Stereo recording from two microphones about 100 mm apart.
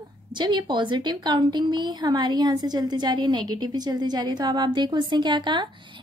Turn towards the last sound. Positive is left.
turn(degrees=-50)  # may be behind; listen again after turning